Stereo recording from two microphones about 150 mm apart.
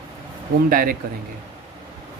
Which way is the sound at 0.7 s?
75° right (ahead or behind).